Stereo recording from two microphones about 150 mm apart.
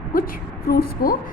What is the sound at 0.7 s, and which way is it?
Speech, 90° left.